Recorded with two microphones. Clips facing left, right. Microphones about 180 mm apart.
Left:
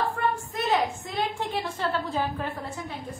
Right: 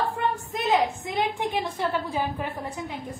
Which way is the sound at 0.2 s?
20° right (ahead or behind).